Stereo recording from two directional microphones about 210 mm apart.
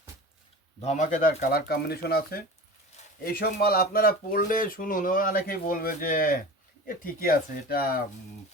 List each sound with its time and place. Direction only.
0.8 s speech: 35° left (ahead or behind)
3.4 s speech: 45° left (ahead or behind)